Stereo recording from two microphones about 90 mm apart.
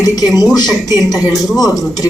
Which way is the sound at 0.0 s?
45° left (ahead or behind).